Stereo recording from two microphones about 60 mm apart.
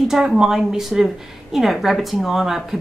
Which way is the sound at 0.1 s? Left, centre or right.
Centre.